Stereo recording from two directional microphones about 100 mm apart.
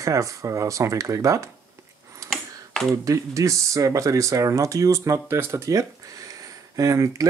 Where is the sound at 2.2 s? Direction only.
30° right (ahead or behind).